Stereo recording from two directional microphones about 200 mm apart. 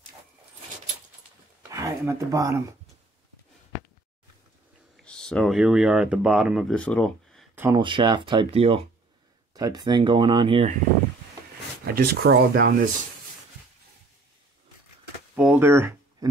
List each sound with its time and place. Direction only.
1.7 s speech: 15° right (ahead or behind)
4.9 s speech: 5° left (ahead or behind)
7.5 s speech: 10° right (ahead or behind)
7.8 s speech: 25° right (ahead or behind)
11.8 s speech: 50° right (ahead or behind)
15.3 s a sound: 5° right (ahead or behind)